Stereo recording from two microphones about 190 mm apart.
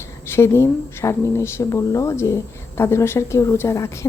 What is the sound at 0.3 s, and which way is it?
Speech, 15° left (ahead or behind).